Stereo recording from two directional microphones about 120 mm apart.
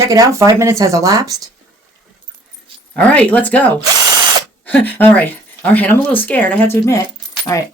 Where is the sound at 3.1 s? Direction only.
10° left (ahead or behind).